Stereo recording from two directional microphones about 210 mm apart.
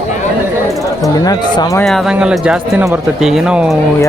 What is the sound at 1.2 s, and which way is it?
Speech, 20° left (ahead or behind).